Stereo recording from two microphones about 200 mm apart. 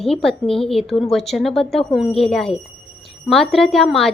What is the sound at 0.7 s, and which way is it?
A woman's voice, centre (ahead or behind).